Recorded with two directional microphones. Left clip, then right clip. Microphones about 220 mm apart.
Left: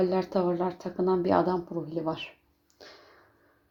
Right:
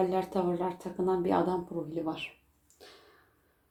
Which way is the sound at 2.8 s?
30° left (ahead or behind).